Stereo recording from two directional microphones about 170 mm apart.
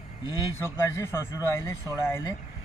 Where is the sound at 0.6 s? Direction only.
15° left (ahead or behind).